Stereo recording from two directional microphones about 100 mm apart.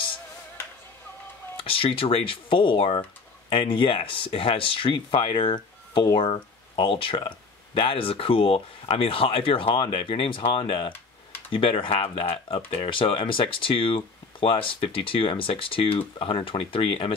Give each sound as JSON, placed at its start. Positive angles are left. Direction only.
{"t": 1.6, "sound": "speech", "side_deg": 65}